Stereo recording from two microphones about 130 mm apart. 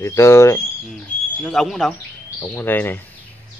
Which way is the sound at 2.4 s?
15° left (ahead or behind).